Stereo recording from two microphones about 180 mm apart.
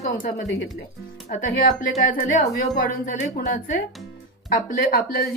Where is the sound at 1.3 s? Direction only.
45° left (ahead or behind).